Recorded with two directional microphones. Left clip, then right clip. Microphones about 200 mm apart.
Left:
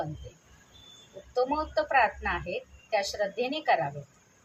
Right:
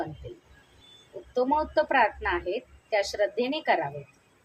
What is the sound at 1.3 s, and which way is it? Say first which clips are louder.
A woman's voice: right 3 dB; 35° right (ahead or behind).